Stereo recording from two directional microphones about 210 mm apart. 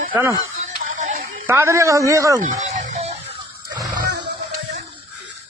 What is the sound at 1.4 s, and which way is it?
Speech, 10° right (ahead or behind).